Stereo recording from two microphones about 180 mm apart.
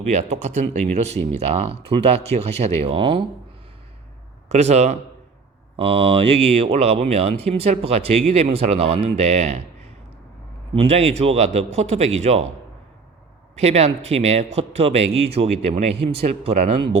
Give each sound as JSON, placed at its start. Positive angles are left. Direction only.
{"t": 0.0, "sound": "speech", "side_deg": -40}
{"t": 4.4, "sound": "speech", "side_deg": -35}
{"t": 10.8, "sound": "speech", "side_deg": -35}
{"t": 13.6, "sound": "speech", "side_deg": -35}